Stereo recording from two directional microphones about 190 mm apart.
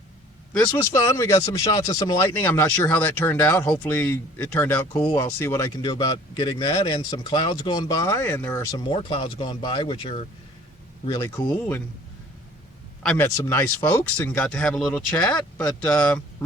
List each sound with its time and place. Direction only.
0.6 s speech: 15° left (ahead or behind)
8.7 s speech: 25° left (ahead or behind)
13.1 s speech: 15° left (ahead or behind)